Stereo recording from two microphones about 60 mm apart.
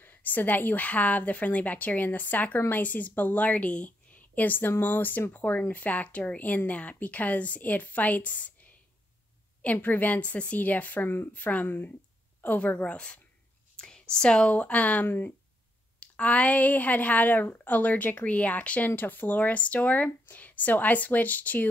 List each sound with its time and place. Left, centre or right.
0.0 s speech: left
9.6 s speech: left
15.0 s speech: left
16.0 s speech: left